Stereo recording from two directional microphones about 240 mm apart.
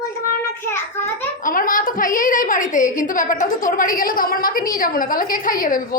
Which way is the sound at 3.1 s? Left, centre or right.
Left.